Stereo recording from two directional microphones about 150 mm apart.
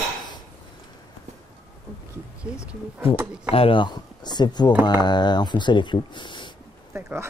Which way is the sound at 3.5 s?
35° left (ahead or behind).